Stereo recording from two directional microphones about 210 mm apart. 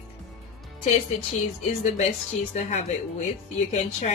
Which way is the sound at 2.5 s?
30° left (ahead or behind).